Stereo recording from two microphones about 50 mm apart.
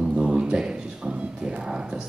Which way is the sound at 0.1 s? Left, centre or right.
Right.